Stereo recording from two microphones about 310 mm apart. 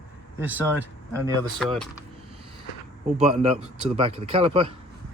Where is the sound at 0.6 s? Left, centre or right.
Centre.